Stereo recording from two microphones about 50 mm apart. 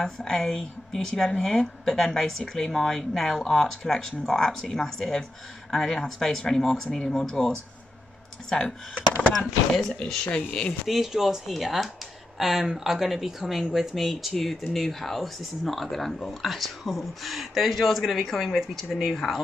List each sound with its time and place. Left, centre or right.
0.0 s speech: centre
10.9 s speech: centre